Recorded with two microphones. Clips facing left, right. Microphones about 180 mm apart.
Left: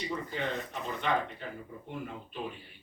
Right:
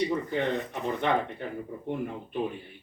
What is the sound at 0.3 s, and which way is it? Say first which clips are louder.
Speech: right 6 dB; 55° right (ahead or behind).